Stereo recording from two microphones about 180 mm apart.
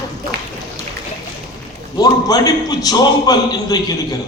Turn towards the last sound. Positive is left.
turn(degrees=20)  # may be behind; listen again after turning